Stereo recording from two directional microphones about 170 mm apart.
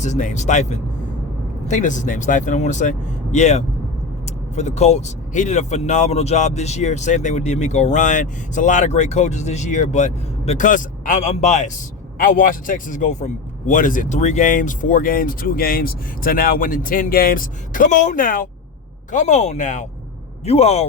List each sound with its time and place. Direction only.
0.0 s a man's voice: 45° left (ahead or behind)